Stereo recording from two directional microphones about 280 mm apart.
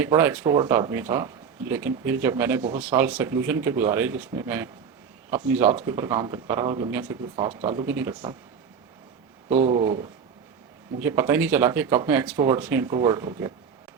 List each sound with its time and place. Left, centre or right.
0.0 s speech: centre
9.5 s speech: centre